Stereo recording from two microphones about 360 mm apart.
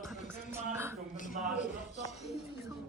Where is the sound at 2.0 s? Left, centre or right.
Centre.